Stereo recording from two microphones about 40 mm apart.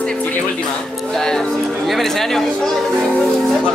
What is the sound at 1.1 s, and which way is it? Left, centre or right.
Speech, centre.